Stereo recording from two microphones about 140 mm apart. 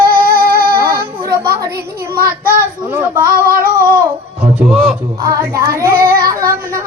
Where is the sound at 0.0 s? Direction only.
90° right.